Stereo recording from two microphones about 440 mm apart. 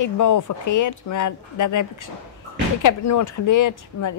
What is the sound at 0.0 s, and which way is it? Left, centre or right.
Speech, left.